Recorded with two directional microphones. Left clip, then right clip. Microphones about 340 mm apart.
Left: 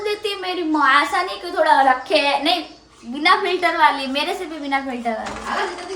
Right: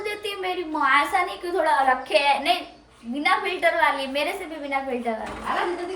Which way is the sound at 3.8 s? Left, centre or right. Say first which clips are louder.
Left 5 dB; centre.